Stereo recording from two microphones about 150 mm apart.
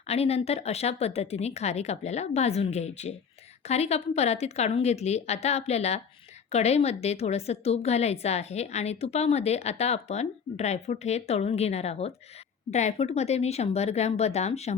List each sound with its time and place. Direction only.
0.1 s a woman's voice: 45° left (ahead or behind)